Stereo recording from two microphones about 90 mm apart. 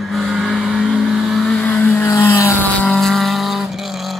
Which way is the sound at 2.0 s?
30° left (ahead or behind).